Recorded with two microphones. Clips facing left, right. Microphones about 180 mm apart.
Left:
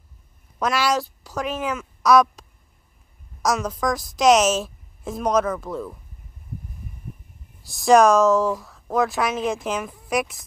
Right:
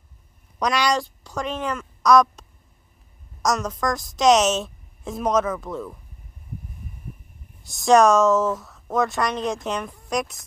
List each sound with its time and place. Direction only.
0.6 s a woman's voice: 5° left (ahead or behind)
3.4 s speech: centre (ahead or behind)
7.6 s speech: centre (ahead or behind)